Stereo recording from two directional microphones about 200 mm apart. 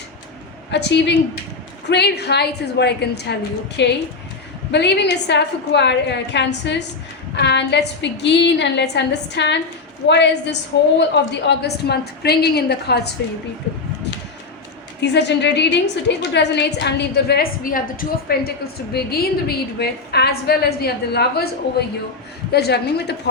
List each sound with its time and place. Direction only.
0.7 s a woman's voice: 60° left (ahead or behind)
15.0 s a woman's voice: 60° left (ahead or behind)